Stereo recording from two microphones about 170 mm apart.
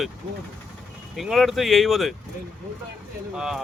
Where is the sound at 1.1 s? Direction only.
Centre (ahead or behind).